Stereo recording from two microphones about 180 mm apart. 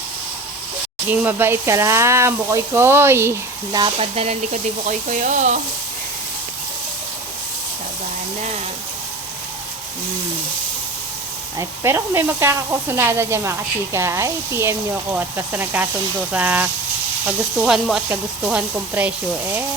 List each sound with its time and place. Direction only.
1.0 s speech: 10° right (ahead or behind)
4.1 s speech: 35° right (ahead or behind)
11.5 s speech: 15° right (ahead or behind)